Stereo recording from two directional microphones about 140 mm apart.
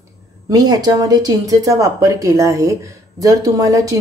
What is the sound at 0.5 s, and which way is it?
Speech, 30° right (ahead or behind).